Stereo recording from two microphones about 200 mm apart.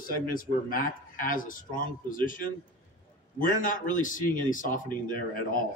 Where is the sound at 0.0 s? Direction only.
45° left (ahead or behind).